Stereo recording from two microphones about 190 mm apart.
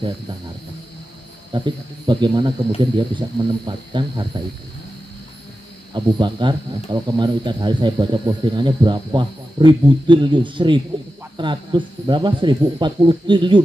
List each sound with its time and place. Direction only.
1.5 s speech: 25° right (ahead or behind)
5.9 s speech: 25° right (ahead or behind)